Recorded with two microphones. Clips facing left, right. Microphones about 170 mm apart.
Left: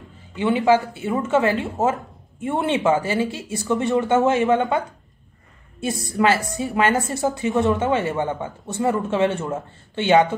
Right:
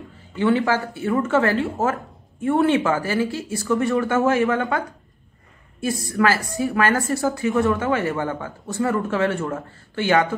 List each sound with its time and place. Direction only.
0.4 s a woman's voice: 15° left (ahead or behind)